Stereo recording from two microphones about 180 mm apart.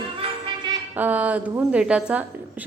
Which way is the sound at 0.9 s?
10° right (ahead or behind).